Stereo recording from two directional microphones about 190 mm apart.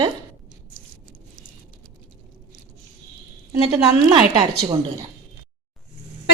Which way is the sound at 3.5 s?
20° right (ahead or behind).